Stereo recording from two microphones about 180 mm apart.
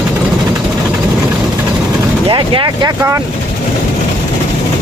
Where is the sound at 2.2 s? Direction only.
30° right (ahead or behind).